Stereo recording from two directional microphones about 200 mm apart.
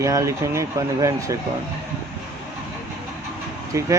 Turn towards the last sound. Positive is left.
turn(degrees=-15)  # may be behind; listen again after turning